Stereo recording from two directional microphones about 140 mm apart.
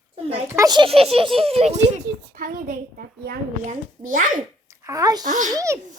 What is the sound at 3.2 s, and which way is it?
A child's voice, 80° right.